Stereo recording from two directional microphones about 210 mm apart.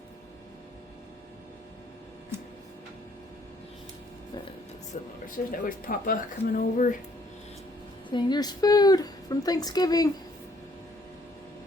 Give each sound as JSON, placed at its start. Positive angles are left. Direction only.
{"t": 5.2, "sound": "speech", "side_deg": 40}
{"t": 8.1, "sound": "speech", "side_deg": 20}